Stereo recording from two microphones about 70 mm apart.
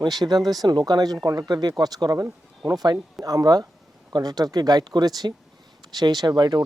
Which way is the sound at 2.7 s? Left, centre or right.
Right.